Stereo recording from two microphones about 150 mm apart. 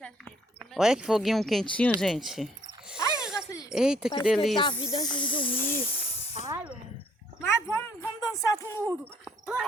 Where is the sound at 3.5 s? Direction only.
20° left (ahead or behind).